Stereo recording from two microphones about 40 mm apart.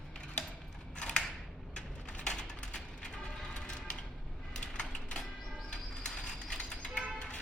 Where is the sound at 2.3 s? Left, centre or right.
Centre.